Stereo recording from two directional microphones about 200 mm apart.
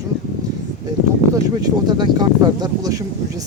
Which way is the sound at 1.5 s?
20° right (ahead or behind).